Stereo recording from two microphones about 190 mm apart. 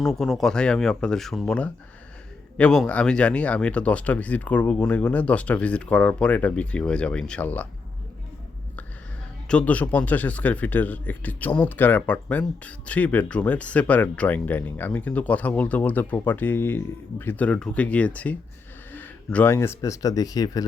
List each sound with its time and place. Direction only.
0.0 s a man's voice: centre (ahead or behind)
9.5 s a man's voice: 5° left (ahead or behind)